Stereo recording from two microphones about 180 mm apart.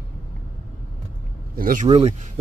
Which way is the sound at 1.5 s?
50° right (ahead or behind).